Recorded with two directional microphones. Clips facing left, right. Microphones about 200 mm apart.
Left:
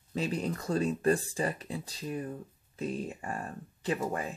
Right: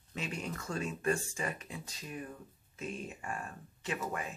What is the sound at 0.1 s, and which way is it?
Speech, 35° left (ahead or behind).